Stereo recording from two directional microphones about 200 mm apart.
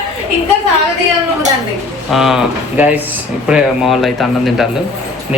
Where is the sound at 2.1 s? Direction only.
Centre (ahead or behind).